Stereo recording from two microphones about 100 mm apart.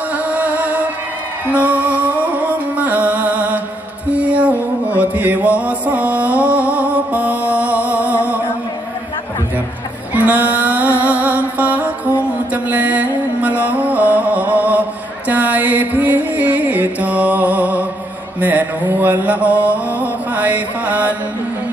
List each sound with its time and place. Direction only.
0.3 s music: 15° right (ahead or behind)
4.1 s mantra: 15° right (ahead or behind)
10.1 s music: 15° right (ahead or behind)
12.6 s mantra: 15° right (ahead or behind)